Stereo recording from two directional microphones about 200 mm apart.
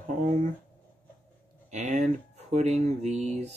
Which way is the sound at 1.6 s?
35° right (ahead or behind).